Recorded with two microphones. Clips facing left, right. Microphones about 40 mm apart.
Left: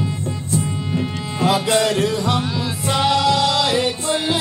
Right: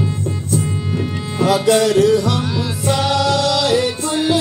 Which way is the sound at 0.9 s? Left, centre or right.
Centre.